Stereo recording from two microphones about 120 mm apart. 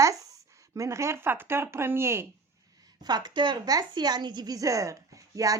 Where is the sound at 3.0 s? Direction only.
35° right (ahead or behind).